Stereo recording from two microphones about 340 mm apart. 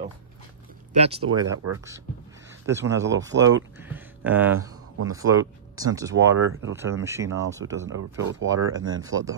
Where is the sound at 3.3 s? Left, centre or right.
Right.